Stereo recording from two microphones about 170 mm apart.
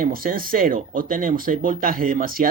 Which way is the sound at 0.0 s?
55° right (ahead or behind).